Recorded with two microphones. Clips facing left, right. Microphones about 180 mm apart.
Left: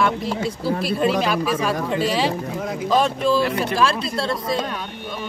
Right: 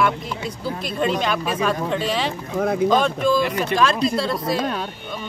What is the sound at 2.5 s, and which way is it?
Speech, 60° right (ahead or behind).